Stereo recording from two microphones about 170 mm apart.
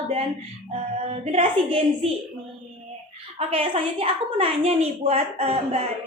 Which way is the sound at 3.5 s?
30° right (ahead or behind).